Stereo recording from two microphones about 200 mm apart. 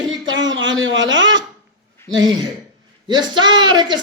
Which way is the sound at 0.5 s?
70° right (ahead or behind).